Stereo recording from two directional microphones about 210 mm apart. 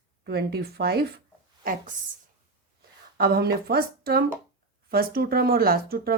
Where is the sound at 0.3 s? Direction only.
50° right (ahead or behind).